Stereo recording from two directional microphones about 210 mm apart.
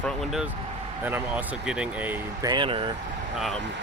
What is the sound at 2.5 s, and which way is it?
Speech, 25° right (ahead or behind).